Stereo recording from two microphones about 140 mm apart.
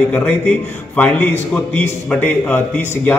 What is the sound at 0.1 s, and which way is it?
A man's voice, 10° left (ahead or behind).